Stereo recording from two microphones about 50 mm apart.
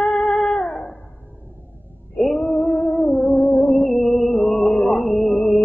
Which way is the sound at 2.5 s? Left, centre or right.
Left.